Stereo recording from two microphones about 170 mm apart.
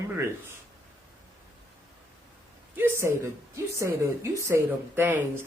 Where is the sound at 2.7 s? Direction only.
15° right (ahead or behind).